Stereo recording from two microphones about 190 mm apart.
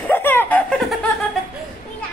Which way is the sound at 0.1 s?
10° left (ahead or behind).